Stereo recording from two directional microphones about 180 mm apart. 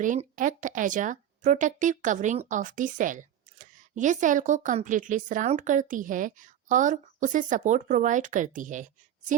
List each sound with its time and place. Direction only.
0.0 s speech: 45° right (ahead or behind)